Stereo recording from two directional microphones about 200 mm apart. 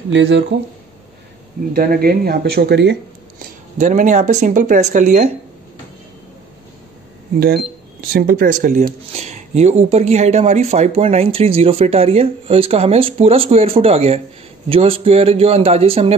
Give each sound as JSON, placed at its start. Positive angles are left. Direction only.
{"t": 0.1, "sound": "speech", "side_deg": -60}
{"t": 1.7, "sound": "speech", "side_deg": -45}
{"t": 3.3, "sound": "speech", "side_deg": -40}
{"t": 7.3, "sound": "speech", "side_deg": -55}